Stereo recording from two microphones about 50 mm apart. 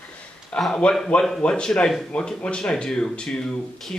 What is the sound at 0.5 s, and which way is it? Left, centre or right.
Speech, left.